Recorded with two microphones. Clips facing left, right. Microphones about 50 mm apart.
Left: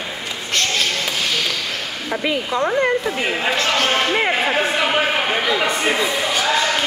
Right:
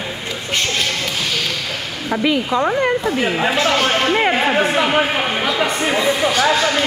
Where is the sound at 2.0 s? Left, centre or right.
Centre.